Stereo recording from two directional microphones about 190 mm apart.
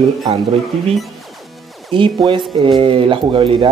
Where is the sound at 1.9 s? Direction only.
25° right (ahead or behind).